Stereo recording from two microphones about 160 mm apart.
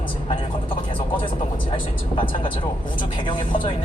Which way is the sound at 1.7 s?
30° left (ahead or behind).